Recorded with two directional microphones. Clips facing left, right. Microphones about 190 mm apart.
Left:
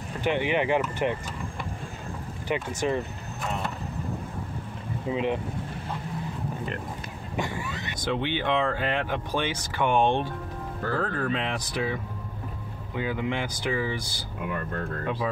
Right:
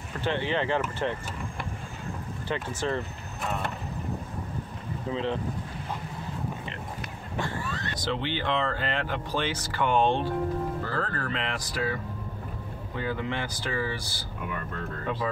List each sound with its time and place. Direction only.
0.2 s speech: 15° left (ahead or behind)
2.5 s speech: 15° left (ahead or behind)
5.1 s speech: 15° left (ahead or behind)
7.3 s speech: 15° left (ahead or behind)